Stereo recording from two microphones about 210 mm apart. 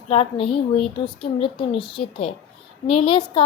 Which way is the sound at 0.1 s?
25° left (ahead or behind).